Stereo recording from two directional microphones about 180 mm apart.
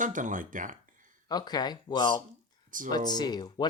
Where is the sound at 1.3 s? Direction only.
20° left (ahead or behind).